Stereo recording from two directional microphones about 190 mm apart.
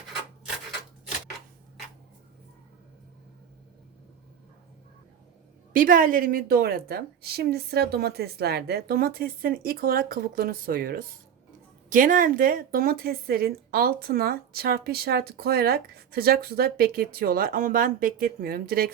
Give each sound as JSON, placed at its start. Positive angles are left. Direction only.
{"t": 5.7, "sound": "speech", "side_deg": -45}